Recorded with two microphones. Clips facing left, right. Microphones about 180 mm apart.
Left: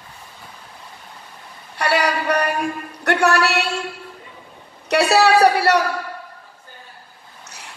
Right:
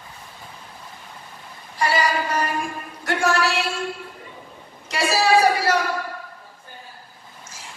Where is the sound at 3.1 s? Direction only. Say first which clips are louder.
Left 4 dB; 70° left (ahead or behind).